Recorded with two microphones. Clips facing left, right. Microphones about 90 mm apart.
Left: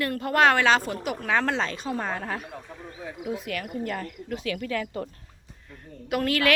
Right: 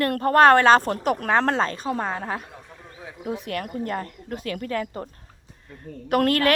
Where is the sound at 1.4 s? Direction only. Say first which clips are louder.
Right 4 dB; 40° right (ahead or behind).